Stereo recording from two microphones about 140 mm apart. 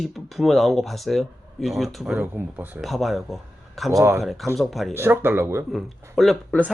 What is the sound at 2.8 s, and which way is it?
Speech, centre (ahead or behind).